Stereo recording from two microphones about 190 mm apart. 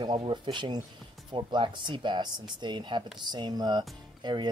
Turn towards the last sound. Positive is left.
turn(degrees=-20)  # may be behind; listen again after turning